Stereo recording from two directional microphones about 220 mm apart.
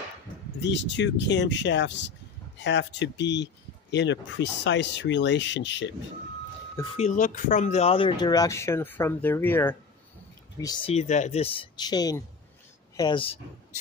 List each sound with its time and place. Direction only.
0.6 s speech: 55° left (ahead or behind)
7.0 s speech: 35° left (ahead or behind); by 9.8 s 10° left (ahead or behind)
10.6 s speech: 20° left (ahead or behind)